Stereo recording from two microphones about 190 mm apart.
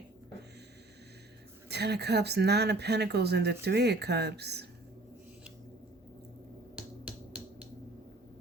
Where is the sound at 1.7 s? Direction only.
60° right (ahead or behind).